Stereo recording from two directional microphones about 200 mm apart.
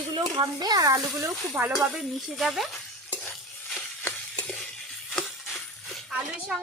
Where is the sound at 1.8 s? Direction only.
Centre (ahead or behind).